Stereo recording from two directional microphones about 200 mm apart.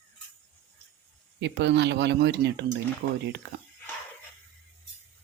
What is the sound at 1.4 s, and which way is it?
Speech, 65° right (ahead or behind).